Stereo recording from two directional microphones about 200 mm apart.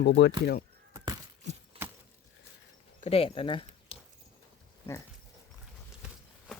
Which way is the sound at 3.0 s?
30° left (ahead or behind).